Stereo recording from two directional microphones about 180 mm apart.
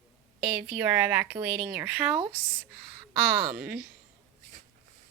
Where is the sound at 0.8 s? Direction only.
10° right (ahead or behind).